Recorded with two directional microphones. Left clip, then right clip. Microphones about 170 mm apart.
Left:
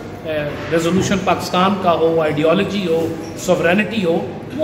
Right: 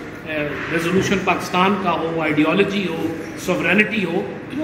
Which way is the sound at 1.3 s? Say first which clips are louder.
Left 3 dB; 40° left (ahead or behind).